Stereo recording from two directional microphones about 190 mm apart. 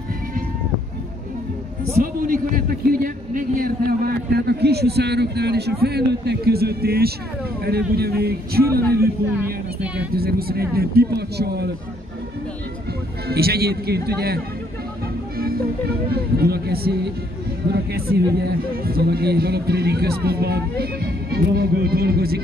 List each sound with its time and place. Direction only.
2.2 s a man's voice: 45° right (ahead or behind)
9.4 s speech: 5° right (ahead or behind)
10.1 s a man's voice: 55° right (ahead or behind)
13.3 s a man's voice: 55° right (ahead or behind)
15.3 s music: 50° right (ahead or behind)
16.1 s a man's voice: 55° right (ahead or behind)